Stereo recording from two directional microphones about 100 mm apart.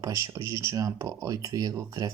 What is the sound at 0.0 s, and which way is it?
Speech, 35° right (ahead or behind).